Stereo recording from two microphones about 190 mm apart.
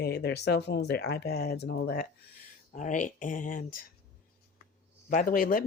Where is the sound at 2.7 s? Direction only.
45° left (ahead or behind).